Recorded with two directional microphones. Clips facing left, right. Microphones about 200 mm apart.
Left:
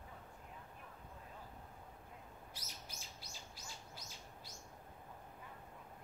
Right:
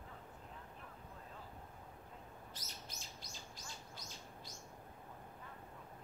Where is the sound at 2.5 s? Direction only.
10° left (ahead or behind).